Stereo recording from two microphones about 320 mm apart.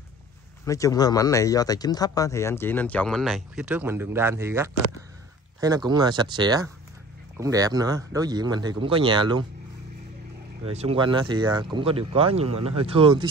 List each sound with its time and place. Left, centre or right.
0.7 s speech: centre
10.6 s speech: centre